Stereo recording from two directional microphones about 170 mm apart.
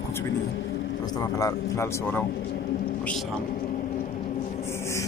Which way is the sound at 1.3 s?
15° left (ahead or behind).